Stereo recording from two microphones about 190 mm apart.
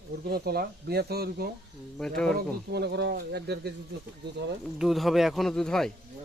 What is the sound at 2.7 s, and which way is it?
Speech, 60° right (ahead or behind).